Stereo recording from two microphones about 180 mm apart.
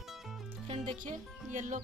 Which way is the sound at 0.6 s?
35° right (ahead or behind).